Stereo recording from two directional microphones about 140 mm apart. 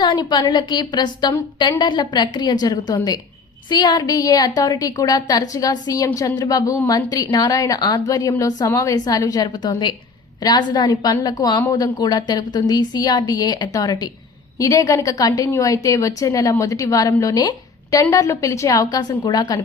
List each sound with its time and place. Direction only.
0.0 s a woman's voice: 30° left (ahead or behind)